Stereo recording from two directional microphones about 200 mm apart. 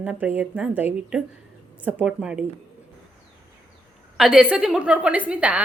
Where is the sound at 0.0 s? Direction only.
5° right (ahead or behind).